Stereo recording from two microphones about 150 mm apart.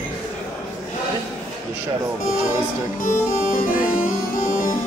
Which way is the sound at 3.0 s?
65° left (ahead or behind).